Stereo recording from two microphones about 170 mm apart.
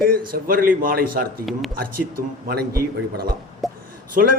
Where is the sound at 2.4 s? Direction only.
65° right (ahead or behind).